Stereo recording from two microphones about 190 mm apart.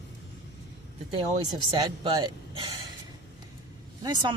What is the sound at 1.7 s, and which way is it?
Speech, 25° right (ahead or behind).